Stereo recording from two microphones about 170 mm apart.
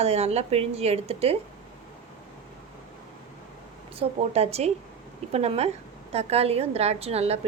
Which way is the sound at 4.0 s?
35° right (ahead or behind).